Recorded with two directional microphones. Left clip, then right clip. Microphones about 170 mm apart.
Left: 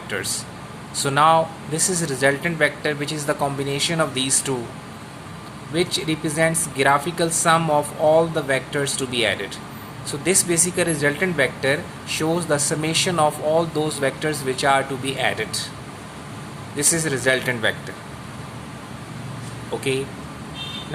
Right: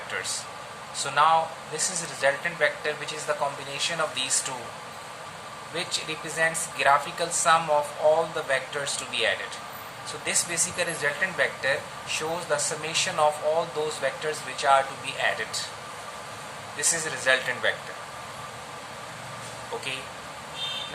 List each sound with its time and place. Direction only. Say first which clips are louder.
0.9 s speech: left 5 dB; 55° left (ahead or behind)
5.7 s speech: left 8 dB; 45° left (ahead or behind)
16.7 s speech: left 6 dB; 50° left (ahead or behind)